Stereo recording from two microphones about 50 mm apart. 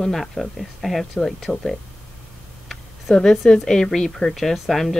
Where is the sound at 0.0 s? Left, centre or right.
Centre.